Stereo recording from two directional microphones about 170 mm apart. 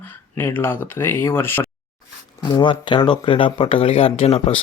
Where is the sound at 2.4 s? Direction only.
25° left (ahead or behind).